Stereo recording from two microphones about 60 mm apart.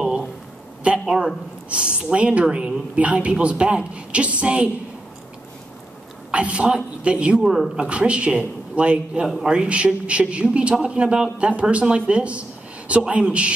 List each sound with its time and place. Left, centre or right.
0.9 s speech: centre
6.3 s speech: centre